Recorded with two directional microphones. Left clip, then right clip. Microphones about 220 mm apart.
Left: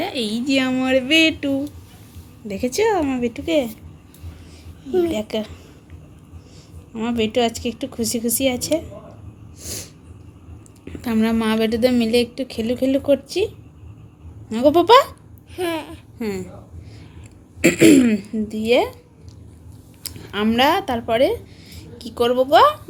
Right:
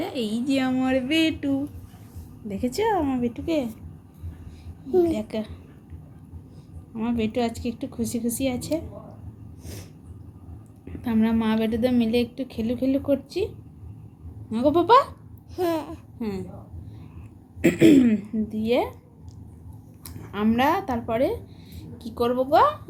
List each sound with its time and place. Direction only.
0.0 s a woman's voice: 5° left (ahead or behind)
0.5 s speech: 15° left (ahead or behind)
5.0 s a woman's voice: 20° left (ahead or behind)
6.9 s a woman's voice: 20° left (ahead or behind)
9.6 s snort: 15° left (ahead or behind)
10.8 s a woman's voice: 20° left (ahead or behind)
14.5 s speech: 15° left (ahead or behind)
15.5 s a sound: 15° right (ahead or behind)
16.1 s speech: 20° left (ahead or behind)
17.6 s speech: 15° left (ahead or behind)
20.3 s speech: 15° left (ahead or behind)